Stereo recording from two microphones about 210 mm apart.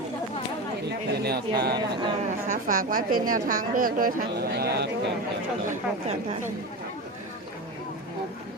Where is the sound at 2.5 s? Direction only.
40° right (ahead or behind).